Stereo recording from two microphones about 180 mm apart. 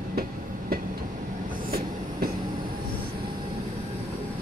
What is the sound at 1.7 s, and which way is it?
Train, 55° right (ahead or behind).